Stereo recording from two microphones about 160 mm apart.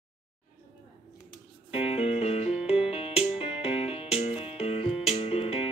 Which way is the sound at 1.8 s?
40° left (ahead or behind).